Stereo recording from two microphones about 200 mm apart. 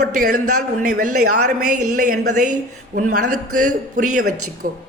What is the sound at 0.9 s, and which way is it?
Speech, 45° right (ahead or behind).